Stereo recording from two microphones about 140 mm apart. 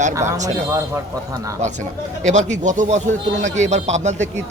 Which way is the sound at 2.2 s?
55° right (ahead or behind).